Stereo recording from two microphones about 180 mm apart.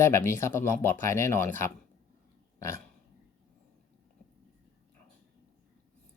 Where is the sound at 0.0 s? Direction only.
15° left (ahead or behind).